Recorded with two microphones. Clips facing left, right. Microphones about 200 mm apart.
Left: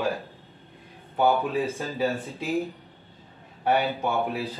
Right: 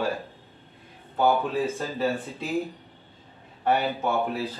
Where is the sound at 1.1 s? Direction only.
15° left (ahead or behind).